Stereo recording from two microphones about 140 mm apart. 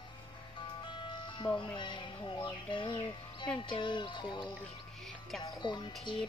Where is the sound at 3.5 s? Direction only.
35° left (ahead or behind).